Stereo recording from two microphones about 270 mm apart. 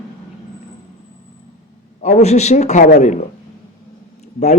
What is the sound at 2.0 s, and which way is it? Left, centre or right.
A man's voice, left.